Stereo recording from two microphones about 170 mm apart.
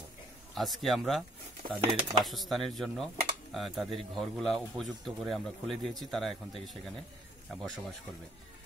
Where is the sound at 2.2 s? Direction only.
Centre (ahead or behind).